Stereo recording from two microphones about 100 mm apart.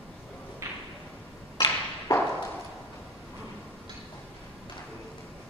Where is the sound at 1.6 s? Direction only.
35° left (ahead or behind).